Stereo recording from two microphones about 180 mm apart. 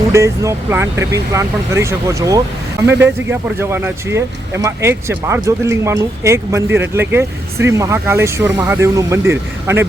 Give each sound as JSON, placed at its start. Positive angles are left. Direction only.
{"t": 0.1, "sound": "speech", "side_deg": -15}